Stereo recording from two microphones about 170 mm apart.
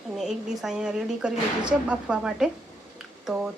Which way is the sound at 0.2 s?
5° right (ahead or behind).